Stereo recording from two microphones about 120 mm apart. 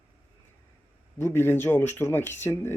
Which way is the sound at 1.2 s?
20° left (ahead or behind).